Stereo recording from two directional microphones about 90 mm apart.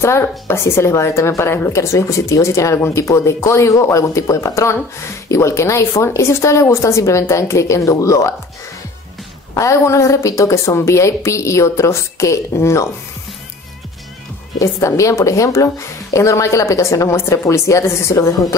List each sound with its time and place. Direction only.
0.0 s a woman's voice: 30° left (ahead or behind)
9.5 s a woman's voice: 35° left (ahead or behind)
14.6 s a woman's voice: 35° left (ahead or behind)